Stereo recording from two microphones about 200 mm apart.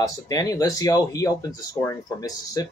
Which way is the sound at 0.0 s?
15° left (ahead or behind).